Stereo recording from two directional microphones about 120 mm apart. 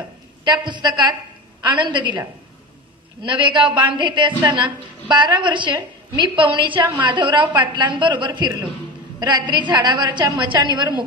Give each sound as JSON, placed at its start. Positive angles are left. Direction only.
{"t": 0.5, "sound": "a woman's voice", "side_deg": -40}